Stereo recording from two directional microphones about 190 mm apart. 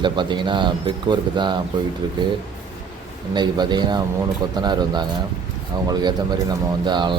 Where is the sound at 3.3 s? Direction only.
25° right (ahead or behind).